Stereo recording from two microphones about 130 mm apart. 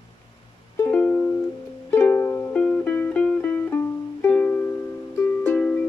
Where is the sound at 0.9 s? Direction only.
10° left (ahead or behind).